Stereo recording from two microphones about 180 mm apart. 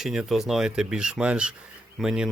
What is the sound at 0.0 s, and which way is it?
Speech, centre (ahead or behind).